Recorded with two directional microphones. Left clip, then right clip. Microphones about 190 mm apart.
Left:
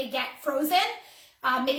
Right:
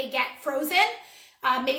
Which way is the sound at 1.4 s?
20° right (ahead or behind).